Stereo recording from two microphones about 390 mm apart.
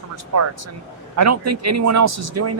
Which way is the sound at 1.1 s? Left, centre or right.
Right.